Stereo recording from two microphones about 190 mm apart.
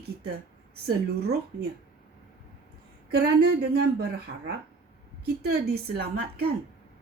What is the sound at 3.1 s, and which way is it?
Speech, 55° right (ahead or behind).